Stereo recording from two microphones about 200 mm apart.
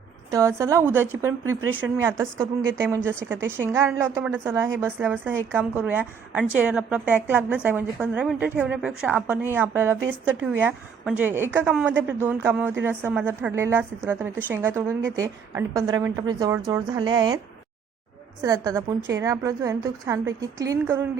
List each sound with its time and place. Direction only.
0.3 s a woman's voice: 15° right (ahead or behind)
18.4 s a woman's voice: 15° right (ahead or behind)